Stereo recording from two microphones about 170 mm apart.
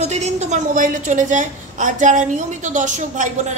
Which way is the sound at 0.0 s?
40° right (ahead or behind).